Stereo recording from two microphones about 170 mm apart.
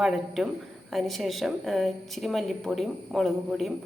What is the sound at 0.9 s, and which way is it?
Speech, centre (ahead or behind).